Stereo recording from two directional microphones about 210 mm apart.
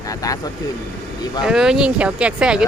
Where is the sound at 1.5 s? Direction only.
5° right (ahead or behind).